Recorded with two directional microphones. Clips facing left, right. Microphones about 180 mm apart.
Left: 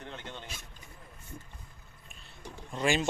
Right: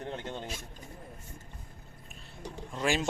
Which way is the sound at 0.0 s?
40° right (ahead or behind).